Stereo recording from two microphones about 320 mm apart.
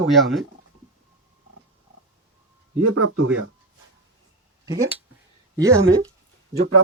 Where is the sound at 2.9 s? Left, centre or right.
Right.